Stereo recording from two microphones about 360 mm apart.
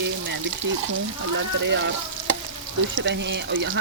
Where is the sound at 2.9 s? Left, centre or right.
Right.